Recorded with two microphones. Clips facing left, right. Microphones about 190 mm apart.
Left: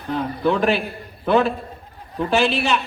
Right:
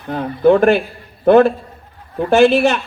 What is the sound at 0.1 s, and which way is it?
A man's voice, 55° right (ahead or behind).